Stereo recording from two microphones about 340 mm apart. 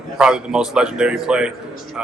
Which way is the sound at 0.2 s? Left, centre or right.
Centre.